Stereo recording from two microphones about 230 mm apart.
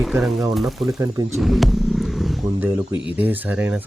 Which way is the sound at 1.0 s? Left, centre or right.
Centre.